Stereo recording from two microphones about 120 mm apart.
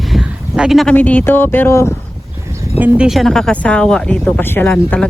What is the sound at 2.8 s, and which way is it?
Speech, 5° right (ahead or behind).